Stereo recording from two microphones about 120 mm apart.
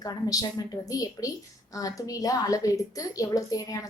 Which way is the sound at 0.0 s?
30° left (ahead or behind).